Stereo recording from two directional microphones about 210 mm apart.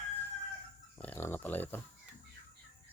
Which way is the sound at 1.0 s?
10° left (ahead or behind).